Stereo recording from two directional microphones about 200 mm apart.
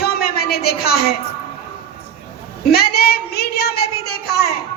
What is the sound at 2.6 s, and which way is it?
A woman's voice, 50° left (ahead or behind).